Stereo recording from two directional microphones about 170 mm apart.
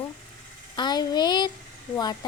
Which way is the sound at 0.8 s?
25° left (ahead or behind).